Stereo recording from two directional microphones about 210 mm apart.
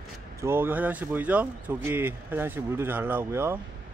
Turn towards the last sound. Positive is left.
turn(degrees=-10)  # may be behind; listen again after turning